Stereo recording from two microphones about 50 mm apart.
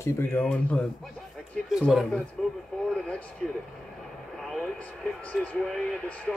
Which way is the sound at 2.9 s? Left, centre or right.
Left.